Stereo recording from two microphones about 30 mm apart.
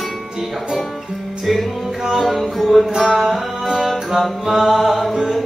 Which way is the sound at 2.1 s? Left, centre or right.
Centre.